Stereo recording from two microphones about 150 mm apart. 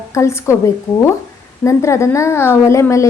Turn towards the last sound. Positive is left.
turn(degrees=20)  # may be behind; listen again after turning